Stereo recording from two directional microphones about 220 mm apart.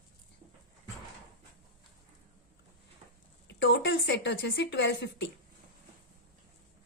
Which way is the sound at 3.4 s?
55° left (ahead or behind).